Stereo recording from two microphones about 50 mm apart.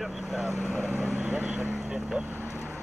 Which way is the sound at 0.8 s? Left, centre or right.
Right.